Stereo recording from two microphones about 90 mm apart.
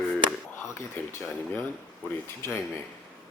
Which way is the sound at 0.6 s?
30° left (ahead or behind).